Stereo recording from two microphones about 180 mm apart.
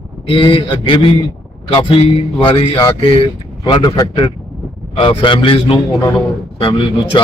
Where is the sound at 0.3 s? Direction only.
30° left (ahead or behind).